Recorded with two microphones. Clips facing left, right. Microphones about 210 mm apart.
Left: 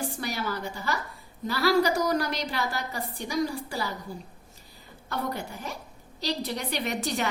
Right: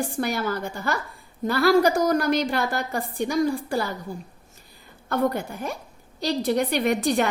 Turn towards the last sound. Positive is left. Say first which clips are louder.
# right 8 dB
turn(degrees=-55)  # may be behind; listen again after turning